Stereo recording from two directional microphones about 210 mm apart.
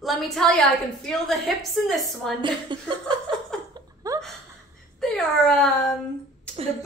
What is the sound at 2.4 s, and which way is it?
Speech, 25° right (ahead or behind).